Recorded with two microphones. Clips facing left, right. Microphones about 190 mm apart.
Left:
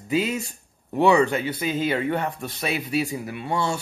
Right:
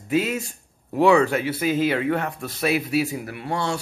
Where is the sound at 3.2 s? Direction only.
20° left (ahead or behind).